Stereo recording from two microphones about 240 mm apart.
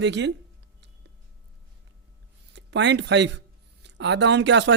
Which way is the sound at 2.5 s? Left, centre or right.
Right.